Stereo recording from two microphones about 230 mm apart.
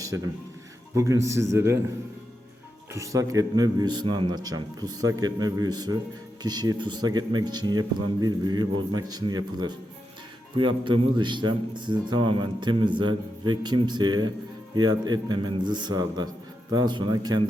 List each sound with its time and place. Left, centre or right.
0.9 s speech: centre
2.9 s a man's voice: centre